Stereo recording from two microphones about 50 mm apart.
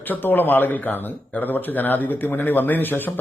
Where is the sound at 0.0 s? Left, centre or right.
Left.